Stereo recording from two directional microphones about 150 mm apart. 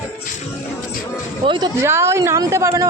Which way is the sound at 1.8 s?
15° right (ahead or behind).